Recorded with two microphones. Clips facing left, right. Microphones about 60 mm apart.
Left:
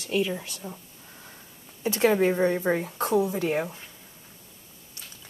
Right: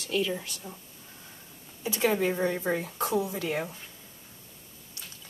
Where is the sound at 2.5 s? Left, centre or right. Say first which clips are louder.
Left 4 dB; centre.